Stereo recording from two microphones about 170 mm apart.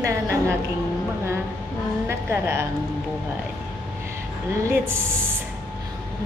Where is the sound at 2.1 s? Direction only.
15° right (ahead or behind).